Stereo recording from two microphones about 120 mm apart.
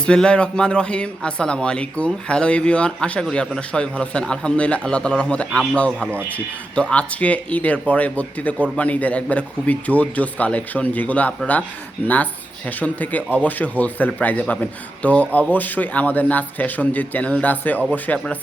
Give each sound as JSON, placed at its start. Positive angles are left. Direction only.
{"t": 0.0, "sound": "speech", "side_deg": 5}